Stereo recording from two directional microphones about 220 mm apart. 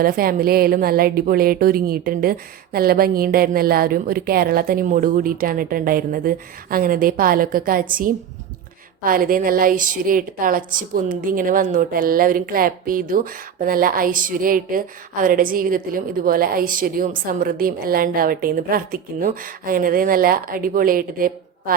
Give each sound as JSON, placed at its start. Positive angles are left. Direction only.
{"t": 0.0, "sound": "a woman's voice", "side_deg": -40}